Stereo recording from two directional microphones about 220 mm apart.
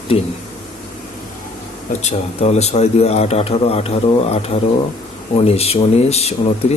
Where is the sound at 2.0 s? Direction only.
30° left (ahead or behind).